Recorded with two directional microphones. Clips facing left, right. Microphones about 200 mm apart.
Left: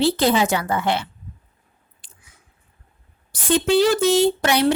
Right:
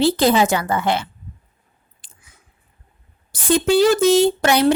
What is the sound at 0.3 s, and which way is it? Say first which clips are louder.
Speech: right 2 dB; 45° right (ahead or behind).